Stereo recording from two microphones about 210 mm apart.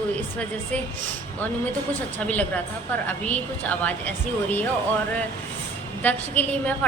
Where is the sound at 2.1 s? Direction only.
5° left (ahead or behind).